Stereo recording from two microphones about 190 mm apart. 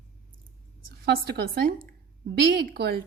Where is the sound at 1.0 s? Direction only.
55° right (ahead or behind).